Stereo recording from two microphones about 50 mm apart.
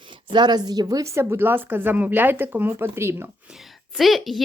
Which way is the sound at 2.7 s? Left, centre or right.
Right.